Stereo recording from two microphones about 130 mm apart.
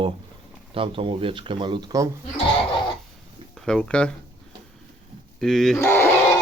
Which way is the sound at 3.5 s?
5° left (ahead or behind).